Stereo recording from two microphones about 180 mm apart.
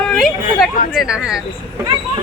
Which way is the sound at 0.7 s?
50° left (ahead or behind).